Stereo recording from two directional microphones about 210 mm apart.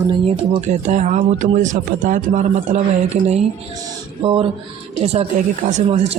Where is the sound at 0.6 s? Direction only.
35° right (ahead or behind).